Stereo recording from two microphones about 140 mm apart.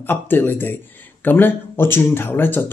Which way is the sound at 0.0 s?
15° left (ahead or behind).